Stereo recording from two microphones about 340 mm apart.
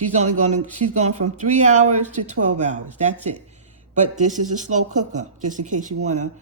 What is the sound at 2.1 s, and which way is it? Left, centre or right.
Speech, right.